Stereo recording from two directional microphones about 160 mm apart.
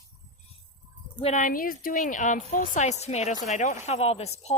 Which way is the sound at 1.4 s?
60° left (ahead or behind).